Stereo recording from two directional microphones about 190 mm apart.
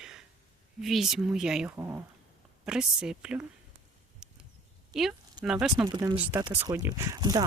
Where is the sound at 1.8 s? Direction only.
15° right (ahead or behind).